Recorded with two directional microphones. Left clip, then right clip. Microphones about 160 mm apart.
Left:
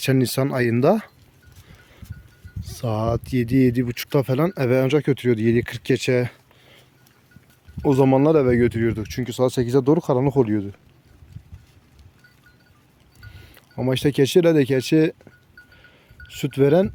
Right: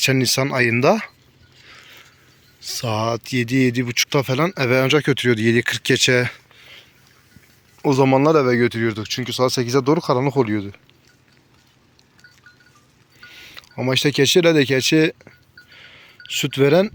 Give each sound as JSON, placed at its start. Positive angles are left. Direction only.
{"t": 0.0, "sound": "speech", "side_deg": 30}
{"t": 2.6, "sound": "speech", "side_deg": 25}
{"t": 13.2, "sound": "speech", "side_deg": 25}
{"t": 15.7, "sound": "a sound", "side_deg": 15}